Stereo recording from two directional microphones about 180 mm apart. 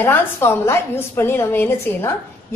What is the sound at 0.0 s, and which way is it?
A woman's voice, 10° left (ahead or behind).